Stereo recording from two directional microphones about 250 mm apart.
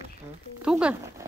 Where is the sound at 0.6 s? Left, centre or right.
Centre.